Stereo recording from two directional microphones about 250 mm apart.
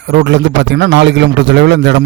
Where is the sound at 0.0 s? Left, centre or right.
Right.